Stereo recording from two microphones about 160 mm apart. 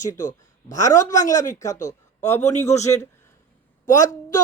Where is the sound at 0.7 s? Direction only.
20° left (ahead or behind).